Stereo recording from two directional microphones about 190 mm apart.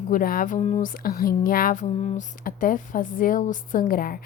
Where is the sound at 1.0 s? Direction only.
50° left (ahead or behind).